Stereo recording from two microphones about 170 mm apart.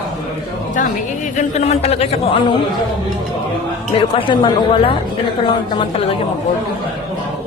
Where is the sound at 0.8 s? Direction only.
45° left (ahead or behind).